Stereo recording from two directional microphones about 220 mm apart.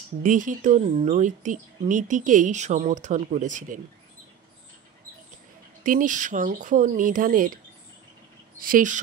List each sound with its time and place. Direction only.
0.2 s speech: 35° right (ahead or behind)
5.9 s speech: 35° right (ahead or behind)
8.5 s speech: 40° right (ahead or behind)